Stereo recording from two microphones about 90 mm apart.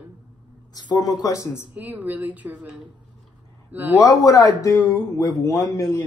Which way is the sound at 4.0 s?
40° left (ahead or behind).